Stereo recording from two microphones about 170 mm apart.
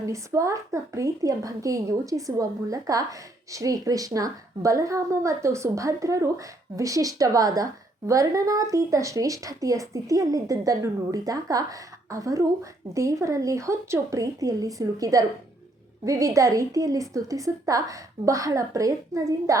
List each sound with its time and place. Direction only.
0.1 s a woman's voice: 20° right (ahead or behind)